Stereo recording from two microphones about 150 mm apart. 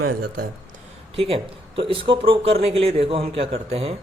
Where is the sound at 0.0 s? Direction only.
85° right.